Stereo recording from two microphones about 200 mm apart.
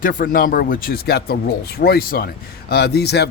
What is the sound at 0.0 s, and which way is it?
Speech, 45° left (ahead or behind).